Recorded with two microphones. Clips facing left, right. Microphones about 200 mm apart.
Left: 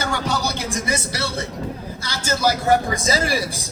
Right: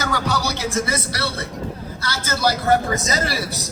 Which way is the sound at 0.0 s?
25° left (ahead or behind).